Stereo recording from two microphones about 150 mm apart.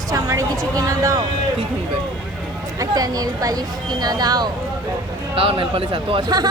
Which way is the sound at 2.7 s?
25° right (ahead or behind).